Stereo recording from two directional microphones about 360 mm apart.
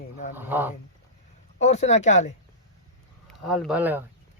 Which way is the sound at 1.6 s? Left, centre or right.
Centre.